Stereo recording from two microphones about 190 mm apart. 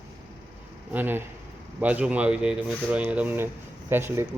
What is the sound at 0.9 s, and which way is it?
Speech, 10° right (ahead or behind).